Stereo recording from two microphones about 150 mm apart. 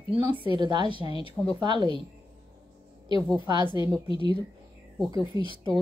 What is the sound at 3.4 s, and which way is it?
Speech, 30° right (ahead or behind).